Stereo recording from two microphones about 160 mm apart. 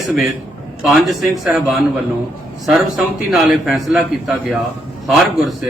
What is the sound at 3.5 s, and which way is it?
A man's voice, centre (ahead or behind).